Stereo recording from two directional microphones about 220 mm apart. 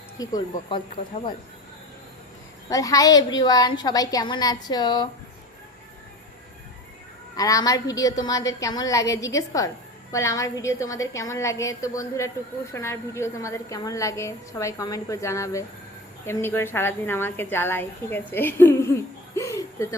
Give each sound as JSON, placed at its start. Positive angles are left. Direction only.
{"t": 0.2, "sound": "a woman's voice", "side_deg": 15}
{"t": 2.6, "sound": "a woman's voice", "side_deg": 15}
{"t": 7.3, "sound": "a woman's voice", "side_deg": 15}
{"t": 19.4, "sound": "a sound", "side_deg": 15}